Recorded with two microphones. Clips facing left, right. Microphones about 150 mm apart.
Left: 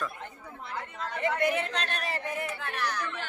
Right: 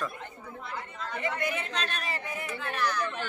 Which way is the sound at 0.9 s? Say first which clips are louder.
Left 4 dB; 60° left (ahead or behind).